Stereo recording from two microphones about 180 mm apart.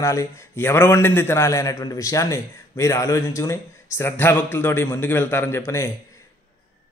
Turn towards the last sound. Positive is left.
turn(degrees=15)  # may be behind; listen again after turning